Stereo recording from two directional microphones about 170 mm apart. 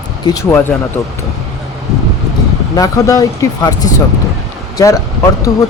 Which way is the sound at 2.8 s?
20° left (ahead or behind).